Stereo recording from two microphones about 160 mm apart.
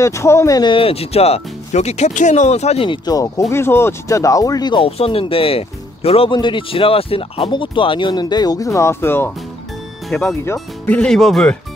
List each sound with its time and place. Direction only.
0.0 s speech: 15° left (ahead or behind)
10.0 s speech: centre (ahead or behind)
10.4 s speech: 15° left (ahead or behind)